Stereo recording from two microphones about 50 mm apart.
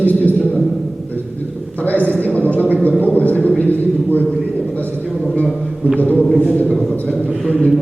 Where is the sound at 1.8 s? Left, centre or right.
Left.